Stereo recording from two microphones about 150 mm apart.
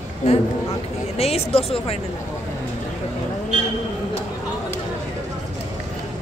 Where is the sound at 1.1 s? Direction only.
45° left (ahead or behind).